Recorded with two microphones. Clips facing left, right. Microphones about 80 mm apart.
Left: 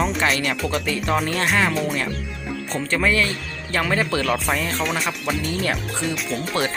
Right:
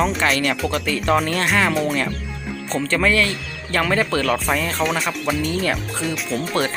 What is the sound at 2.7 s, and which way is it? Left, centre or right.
Speech, centre.